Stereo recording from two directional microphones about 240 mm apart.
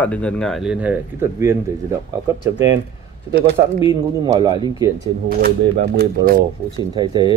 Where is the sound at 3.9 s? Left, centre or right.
Centre.